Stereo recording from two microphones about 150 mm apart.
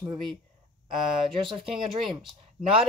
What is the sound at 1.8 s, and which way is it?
Speech, 30° right (ahead or behind).